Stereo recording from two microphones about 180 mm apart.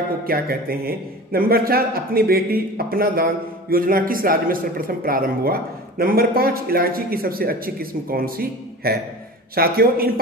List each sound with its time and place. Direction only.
0.2 s a man's voice: 55° right (ahead or behind)